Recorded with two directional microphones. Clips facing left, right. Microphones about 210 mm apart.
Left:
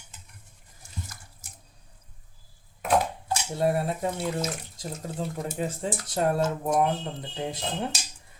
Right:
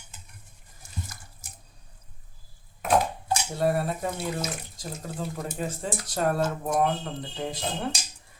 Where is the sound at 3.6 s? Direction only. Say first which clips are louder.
Left 1 dB; 20° left (ahead or behind).